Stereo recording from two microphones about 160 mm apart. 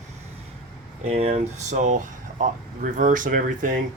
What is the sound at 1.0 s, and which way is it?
Speech, 40° right (ahead or behind).